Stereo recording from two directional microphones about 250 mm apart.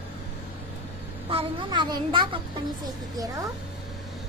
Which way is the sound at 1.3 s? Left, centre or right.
Centre.